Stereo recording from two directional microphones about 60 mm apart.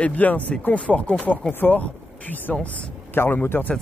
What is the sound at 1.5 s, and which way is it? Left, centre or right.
Speech, left.